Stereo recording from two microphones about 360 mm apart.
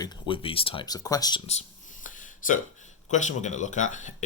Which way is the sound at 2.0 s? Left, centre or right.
Left.